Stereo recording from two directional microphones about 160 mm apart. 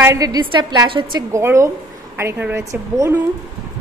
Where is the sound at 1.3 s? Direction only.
15° right (ahead or behind).